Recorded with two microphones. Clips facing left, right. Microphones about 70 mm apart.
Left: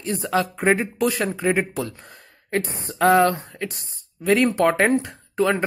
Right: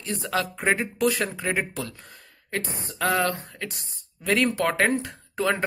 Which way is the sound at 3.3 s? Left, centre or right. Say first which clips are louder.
Left 4 dB; centre.